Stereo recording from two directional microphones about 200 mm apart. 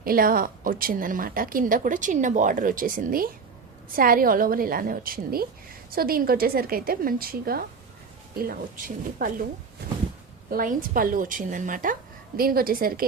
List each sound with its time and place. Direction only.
0.0 s a woman's voice: 45° right (ahead or behind)
10.5 s a woman's voice: 45° right (ahead or behind)